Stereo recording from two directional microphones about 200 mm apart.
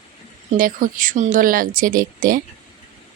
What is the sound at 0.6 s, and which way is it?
A woman's voice, 45° right (ahead or behind).